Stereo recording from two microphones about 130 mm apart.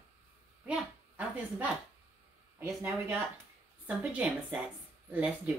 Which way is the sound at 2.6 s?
20° right (ahead or behind).